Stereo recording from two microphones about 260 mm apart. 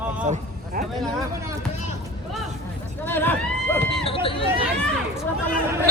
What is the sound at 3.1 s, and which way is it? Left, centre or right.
Hubbub, centre.